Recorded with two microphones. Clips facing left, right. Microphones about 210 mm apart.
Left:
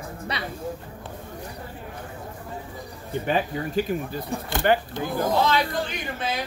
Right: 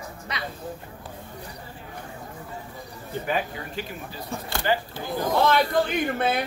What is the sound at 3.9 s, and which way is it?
Speech, 45° left (ahead or behind).